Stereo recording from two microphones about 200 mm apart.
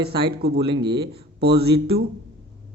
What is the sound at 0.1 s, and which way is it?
Speech, 25° right (ahead or behind).